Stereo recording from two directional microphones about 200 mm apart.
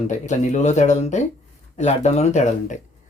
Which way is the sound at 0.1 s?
35° left (ahead or behind).